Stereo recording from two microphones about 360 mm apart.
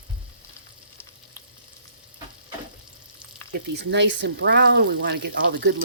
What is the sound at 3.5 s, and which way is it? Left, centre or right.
Speech, right.